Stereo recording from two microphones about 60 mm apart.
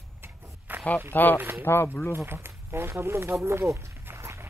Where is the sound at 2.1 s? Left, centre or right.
Right.